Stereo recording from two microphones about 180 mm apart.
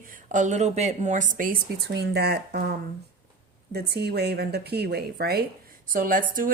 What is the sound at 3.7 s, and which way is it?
A woman's voice, 65° right (ahead or behind).